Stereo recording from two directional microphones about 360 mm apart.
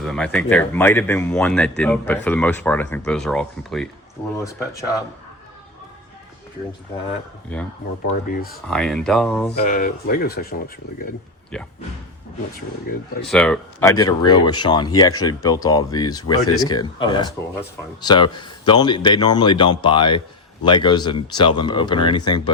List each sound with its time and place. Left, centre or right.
0.0 s speech: centre
8.0 s speech: left
8.6 s speech: centre
9.6 s speech: left
11.5 s speech: centre
12.9 s speech: left
13.2 s speech: centre